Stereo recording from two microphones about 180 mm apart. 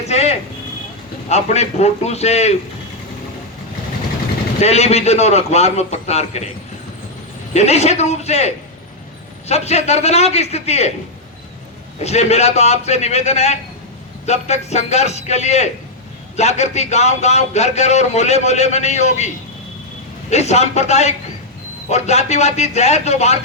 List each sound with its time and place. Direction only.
0.0 s a sound: 35° left (ahead or behind)
1.3 s speech: 35° left (ahead or behind)
4.6 s speech: 35° left (ahead or behind)
7.5 s speech: 35° left (ahead or behind)
11.9 s speech: 35° left (ahead or behind)
20.3 s speech: 40° left (ahead or behind)